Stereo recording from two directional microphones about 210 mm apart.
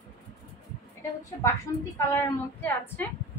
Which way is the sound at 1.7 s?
15° left (ahead or behind).